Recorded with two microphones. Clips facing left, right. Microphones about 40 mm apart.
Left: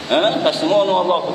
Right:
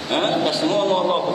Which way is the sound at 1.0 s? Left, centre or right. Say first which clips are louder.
Left 3 dB; centre.